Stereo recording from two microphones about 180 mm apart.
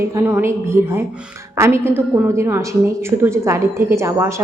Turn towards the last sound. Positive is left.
turn(degrees=-15)  # may be behind; listen again after turning